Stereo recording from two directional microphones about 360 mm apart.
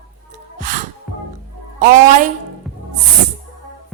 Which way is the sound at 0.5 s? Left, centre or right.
Right.